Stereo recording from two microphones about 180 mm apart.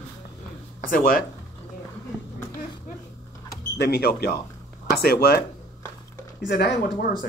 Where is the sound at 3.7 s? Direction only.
65° left (ahead or behind).